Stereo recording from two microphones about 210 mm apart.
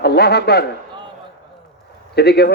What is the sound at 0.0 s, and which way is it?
Speech, 50° left (ahead or behind).